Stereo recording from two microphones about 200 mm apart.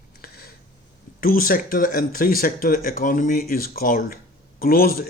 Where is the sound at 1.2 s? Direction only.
45° left (ahead or behind).